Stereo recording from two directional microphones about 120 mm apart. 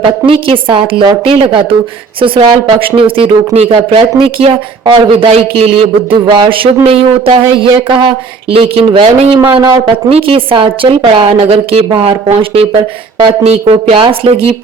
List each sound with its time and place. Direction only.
0.0 s speech: 50° right (ahead or behind)
2.8 s speech: 50° right (ahead or behind)
10.1 s speech: 50° right (ahead or behind)
11.9 s speech: 45° right (ahead or behind)
13.4 s speech: 60° right (ahead or behind)